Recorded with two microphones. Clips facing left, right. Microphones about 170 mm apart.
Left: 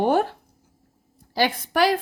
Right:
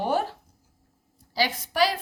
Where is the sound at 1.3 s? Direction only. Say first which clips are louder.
Left 3 dB; 55° left (ahead or behind).